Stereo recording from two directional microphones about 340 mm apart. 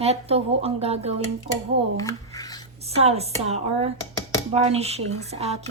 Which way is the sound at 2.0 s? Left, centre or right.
Centre.